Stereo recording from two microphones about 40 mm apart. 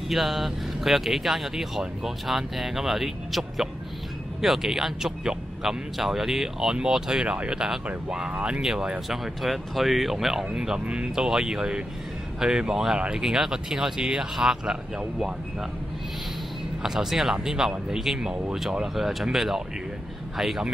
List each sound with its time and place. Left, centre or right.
0.1 s speech: centre
9.1 s speech: centre
10.5 s speech: centre
16.8 s speech: centre